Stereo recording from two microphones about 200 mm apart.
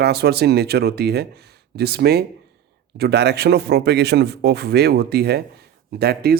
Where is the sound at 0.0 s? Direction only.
55° right (ahead or behind).